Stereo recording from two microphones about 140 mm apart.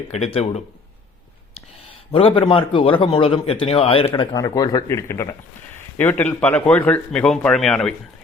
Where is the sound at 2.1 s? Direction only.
40° left (ahead or behind).